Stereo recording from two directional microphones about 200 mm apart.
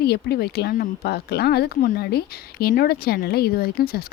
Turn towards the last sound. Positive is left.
turn(degrees=50)  # may be behind; listen again after turning